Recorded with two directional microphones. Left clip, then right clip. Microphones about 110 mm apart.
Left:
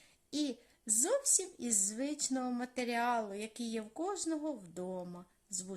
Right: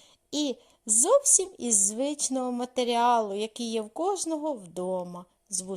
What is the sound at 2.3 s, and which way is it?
A woman's voice, 45° right (ahead or behind).